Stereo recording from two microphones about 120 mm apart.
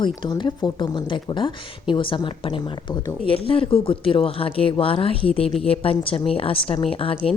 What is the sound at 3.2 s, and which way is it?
Speech, 50° left (ahead or behind).